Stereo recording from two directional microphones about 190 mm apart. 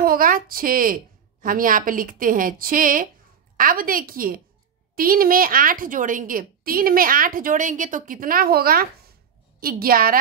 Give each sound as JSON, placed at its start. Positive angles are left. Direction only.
{"t": 0.0, "sound": "a woman's voice", "side_deg": -50}